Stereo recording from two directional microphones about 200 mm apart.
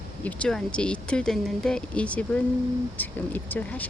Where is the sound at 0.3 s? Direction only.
5° left (ahead or behind).